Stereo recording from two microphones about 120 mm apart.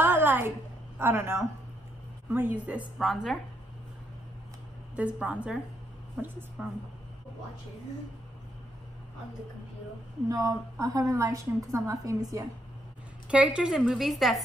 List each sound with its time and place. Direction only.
0.0 s a sound: 15° right (ahead or behind)
0.9 s a woman's voice: 20° right (ahead or behind)
3.0 s a woman's voice: centre (ahead or behind)
4.9 s a woman's voice: 10° right (ahead or behind)
10.2 s a woman's voice: 30° right (ahead or behind)
13.3 s a woman's voice: 10° right (ahead or behind)